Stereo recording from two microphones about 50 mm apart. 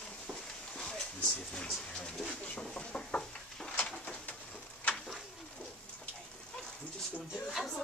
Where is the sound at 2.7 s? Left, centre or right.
Left.